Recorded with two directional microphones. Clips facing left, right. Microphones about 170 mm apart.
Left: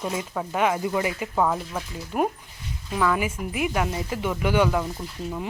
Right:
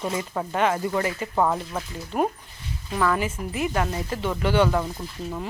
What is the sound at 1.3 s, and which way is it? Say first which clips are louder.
Speech: right 1 dB; 5° right (ahead or behind).